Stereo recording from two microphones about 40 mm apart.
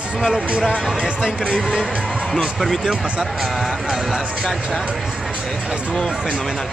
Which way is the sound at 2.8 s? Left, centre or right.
Right.